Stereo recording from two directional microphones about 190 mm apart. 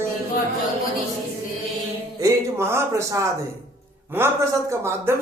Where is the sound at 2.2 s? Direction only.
15° right (ahead or behind).